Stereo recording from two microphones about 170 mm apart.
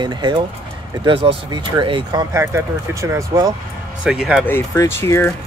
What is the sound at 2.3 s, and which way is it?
Speech, 15° right (ahead or behind).